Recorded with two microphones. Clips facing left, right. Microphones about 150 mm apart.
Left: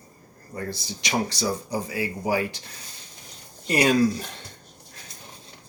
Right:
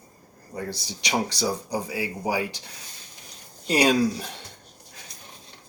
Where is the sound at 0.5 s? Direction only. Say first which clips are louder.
Even; 10° right (ahead or behind).